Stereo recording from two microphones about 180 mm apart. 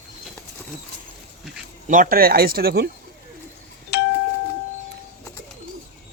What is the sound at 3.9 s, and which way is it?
Doorbell, 65° left (ahead or behind).